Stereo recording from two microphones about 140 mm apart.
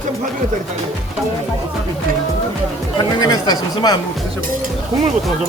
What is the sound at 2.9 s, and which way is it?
Speech, 30° left (ahead or behind).